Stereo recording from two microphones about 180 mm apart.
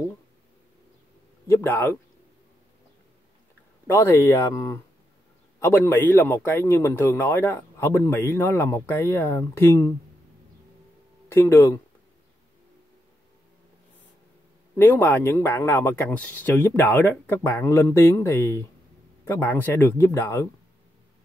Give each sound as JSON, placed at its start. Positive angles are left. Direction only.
{"t": 1.5, "sound": "a man's voice", "side_deg": 10}
{"t": 3.8, "sound": "a man's voice", "side_deg": 15}
{"t": 11.2, "sound": "speech", "side_deg": 15}
{"t": 14.8, "sound": "a man's voice", "side_deg": 10}